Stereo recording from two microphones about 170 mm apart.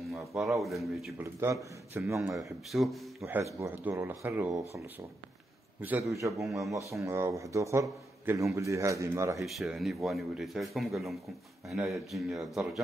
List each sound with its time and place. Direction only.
0.4 s speech: centre (ahead or behind)
1.2 s a man's voice: 15° right (ahead or behind)
2.7 s speech: centre (ahead or behind)
3.2 s a man's voice: 10° right (ahead or behind)
5.8 s a man's voice: 10° right (ahead or behind)
6.4 s speech: centre (ahead or behind)
6.9 s a man's voice: 15° right (ahead or behind)
9.4 s speech: centre (ahead or behind)